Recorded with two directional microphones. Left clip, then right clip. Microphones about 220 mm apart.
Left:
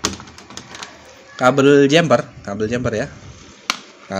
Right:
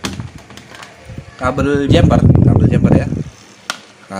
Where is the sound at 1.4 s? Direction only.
25° left (ahead or behind).